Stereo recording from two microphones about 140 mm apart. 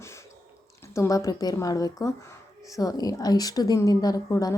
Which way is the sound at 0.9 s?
20° left (ahead or behind).